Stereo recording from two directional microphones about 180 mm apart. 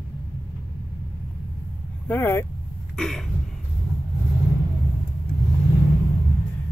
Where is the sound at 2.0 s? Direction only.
10° left (ahead or behind).